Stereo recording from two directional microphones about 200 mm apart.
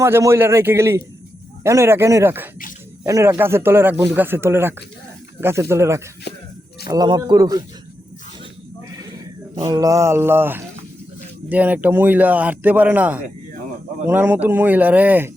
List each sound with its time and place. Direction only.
0.0 s speech: 15° right (ahead or behind)
6.3 s speech: 55° left (ahead or behind)
6.8 s a man's voice: 20° right (ahead or behind)
9.6 s speech: 20° right (ahead or behind)